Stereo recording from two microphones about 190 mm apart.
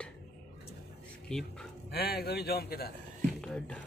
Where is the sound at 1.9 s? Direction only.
55° left (ahead or behind).